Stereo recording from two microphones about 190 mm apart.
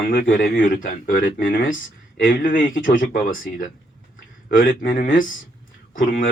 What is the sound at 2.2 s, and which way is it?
Speech, 45° left (ahead or behind).